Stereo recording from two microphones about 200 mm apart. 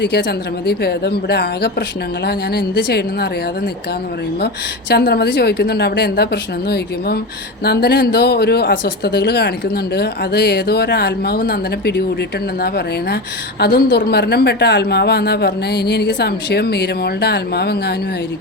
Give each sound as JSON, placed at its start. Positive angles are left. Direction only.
{"t": 0.0, "sound": "speech", "side_deg": 55}
{"t": 4.9, "sound": "a woman's voice", "side_deg": 50}